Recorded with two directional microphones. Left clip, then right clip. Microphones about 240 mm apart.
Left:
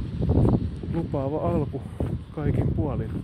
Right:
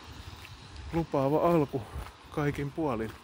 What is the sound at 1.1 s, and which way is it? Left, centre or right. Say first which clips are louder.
Speech: right 2 dB; centre.